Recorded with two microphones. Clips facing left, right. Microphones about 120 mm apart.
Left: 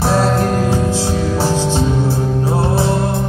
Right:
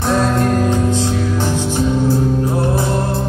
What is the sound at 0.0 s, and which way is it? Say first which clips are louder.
Music: left 1 dB; 30° left (ahead or behind).